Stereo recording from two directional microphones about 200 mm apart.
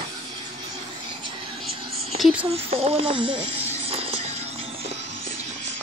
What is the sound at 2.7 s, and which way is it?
Music, 30° right (ahead or behind).